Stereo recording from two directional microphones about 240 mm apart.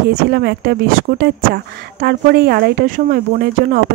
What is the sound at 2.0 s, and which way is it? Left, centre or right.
A woman's voice, right.